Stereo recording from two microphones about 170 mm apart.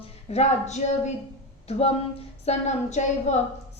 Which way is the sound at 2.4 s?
40° left (ahead or behind).